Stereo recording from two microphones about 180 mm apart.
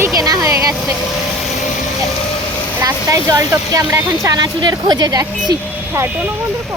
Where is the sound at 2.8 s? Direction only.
20° right (ahead or behind).